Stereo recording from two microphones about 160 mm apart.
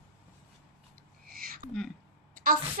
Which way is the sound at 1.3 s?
65° right (ahead or behind).